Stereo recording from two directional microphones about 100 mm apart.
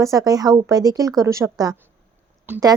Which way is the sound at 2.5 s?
20° right (ahead or behind).